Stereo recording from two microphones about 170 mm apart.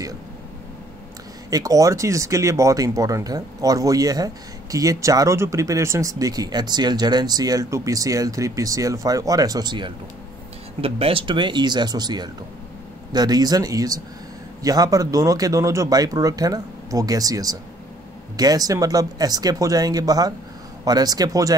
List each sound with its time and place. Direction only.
1.5 s speech: 20° right (ahead or behind)